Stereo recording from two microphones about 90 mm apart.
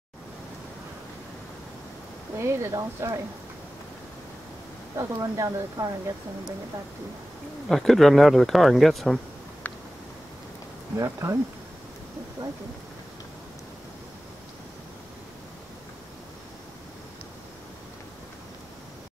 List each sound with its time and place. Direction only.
2.3 s speech: 30° right (ahead or behind)
4.9 s speech: 40° right (ahead or behind)
7.6 s speech: centre (ahead or behind)
9.6 s a sound: 15° left (ahead or behind)
11.0 s speech: 35° right (ahead or behind)
12.4 s speech: 50° right (ahead or behind)